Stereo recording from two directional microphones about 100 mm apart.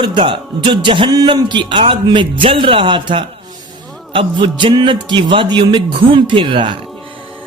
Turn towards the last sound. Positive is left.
turn(degrees=-55)  # may be behind; listen again after turning